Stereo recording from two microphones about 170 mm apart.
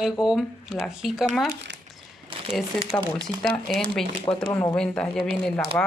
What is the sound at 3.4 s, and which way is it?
Speech, 5° left (ahead or behind).